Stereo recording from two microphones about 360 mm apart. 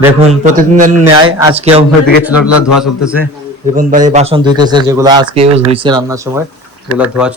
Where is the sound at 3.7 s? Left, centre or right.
Right; by 7.3 s centre.